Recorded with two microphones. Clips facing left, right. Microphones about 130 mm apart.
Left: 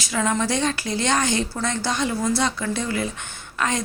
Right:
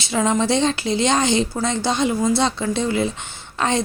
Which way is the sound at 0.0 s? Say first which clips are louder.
Right 4 dB; 25° right (ahead or behind).